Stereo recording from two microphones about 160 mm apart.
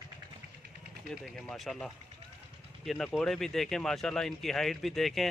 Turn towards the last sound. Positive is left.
turn(degrees=0)  # may be behind; listen again after turning